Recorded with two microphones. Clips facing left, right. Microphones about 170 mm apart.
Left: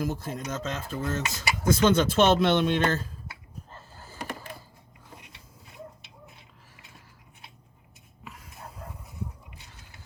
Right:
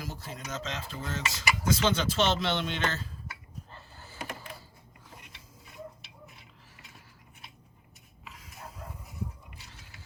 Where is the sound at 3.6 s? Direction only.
45° left (ahead or behind).